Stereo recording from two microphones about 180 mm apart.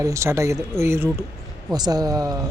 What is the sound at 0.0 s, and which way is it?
A man's voice, 15° right (ahead or behind).